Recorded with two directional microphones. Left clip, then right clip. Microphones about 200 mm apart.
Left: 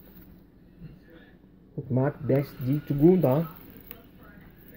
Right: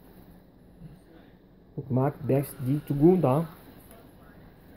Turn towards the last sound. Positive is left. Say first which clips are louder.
# left 1 dB
turn(degrees=0)  # may be behind; listen again after turning